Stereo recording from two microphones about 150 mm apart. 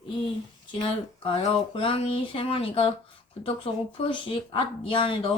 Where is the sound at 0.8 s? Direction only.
35° left (ahead or behind).